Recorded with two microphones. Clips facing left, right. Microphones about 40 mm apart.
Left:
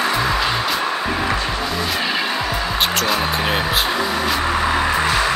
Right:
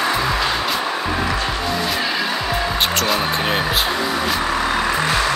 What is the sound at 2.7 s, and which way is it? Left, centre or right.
Music, centre.